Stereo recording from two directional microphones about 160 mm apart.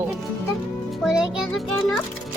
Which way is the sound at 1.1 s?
5° right (ahead or behind).